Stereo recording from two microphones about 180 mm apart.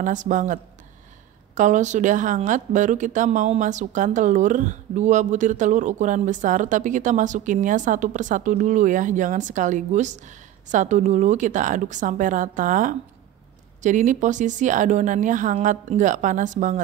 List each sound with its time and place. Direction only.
0.0 s a woman's voice: 45° right (ahead or behind)